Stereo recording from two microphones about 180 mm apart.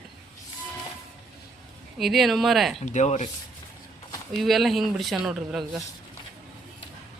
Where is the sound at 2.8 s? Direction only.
40° left (ahead or behind).